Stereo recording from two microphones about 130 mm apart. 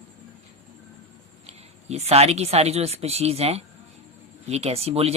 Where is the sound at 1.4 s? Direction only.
55° right (ahead or behind).